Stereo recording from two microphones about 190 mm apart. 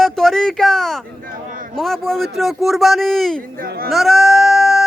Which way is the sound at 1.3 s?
45° right (ahead or behind).